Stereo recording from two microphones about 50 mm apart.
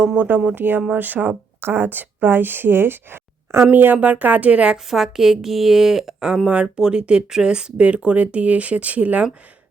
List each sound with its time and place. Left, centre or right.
0.0 s speech: right
0.3 s speech: right
5.0 s speech: centre; by 9.2 s right